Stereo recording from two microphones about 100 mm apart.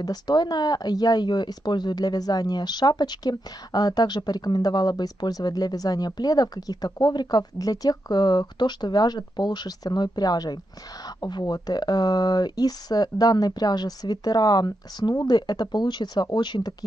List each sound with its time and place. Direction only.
0.0 s speech: 45° left (ahead or behind)